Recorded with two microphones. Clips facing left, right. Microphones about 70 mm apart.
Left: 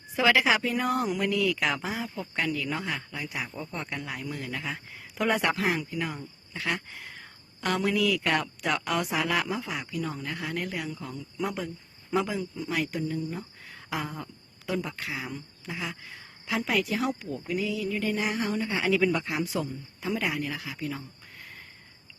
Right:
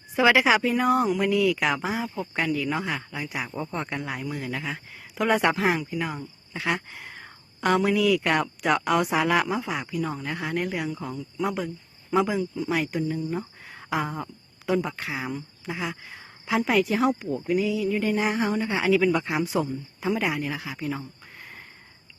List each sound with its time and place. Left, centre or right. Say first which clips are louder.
0.2 s speech: right 4 dB; centre
3.5 s a woman's voice: right 5 dB; right
4.2 s speech: right 4 dB; centre
5.4 s a woman's voice: right 4 dB; right
6.0 s a woman's voice: right 3 dB; centre
10.2 s a woman's voice: right 4 dB; right
11.3 s speech: right 4 dB; centre
12.6 s a woman's voice: right 1 dB; centre
18.9 s speech: right 4 dB; centre
19.5 s a woman's voice: right 5 dB; right